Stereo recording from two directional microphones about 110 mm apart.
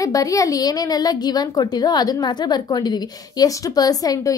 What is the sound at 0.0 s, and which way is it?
A woman's voice, 30° left (ahead or behind).